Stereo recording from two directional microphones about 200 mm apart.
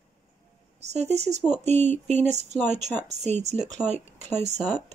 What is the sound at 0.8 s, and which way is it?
Speech, 35° right (ahead or behind).